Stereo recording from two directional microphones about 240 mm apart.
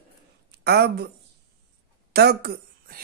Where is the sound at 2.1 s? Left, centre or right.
Right.